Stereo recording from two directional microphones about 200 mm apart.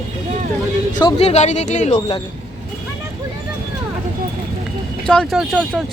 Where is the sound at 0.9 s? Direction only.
30° left (ahead or behind).